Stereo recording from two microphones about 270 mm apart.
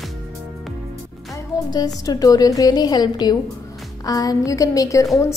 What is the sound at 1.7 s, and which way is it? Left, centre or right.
A woman's voice, centre.